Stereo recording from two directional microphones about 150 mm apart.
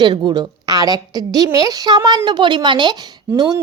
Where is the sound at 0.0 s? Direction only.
30° right (ahead or behind).